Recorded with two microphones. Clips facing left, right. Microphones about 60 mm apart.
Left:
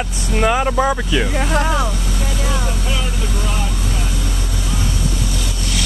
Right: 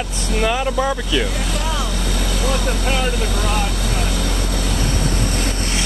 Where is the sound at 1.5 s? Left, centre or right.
Left.